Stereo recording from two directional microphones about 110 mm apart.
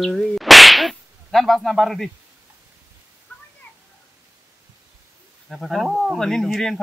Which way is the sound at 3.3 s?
15° left (ahead or behind).